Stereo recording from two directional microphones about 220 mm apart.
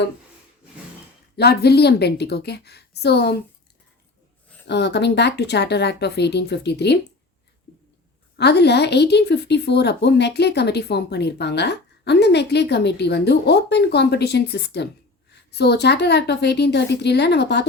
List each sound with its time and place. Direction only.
1.4 s speech: 45° left (ahead or behind)
4.6 s speech: 50° left (ahead or behind)
8.4 s speech: 50° left (ahead or behind)